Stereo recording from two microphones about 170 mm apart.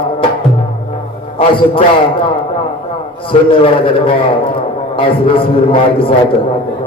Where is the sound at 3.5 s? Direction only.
30° left (ahead or behind).